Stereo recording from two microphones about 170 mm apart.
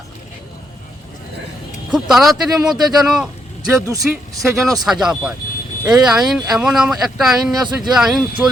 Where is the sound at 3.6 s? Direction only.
20° right (ahead or behind).